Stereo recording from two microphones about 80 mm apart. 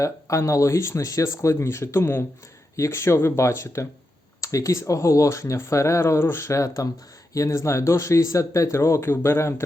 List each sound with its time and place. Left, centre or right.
0.0 s speech: left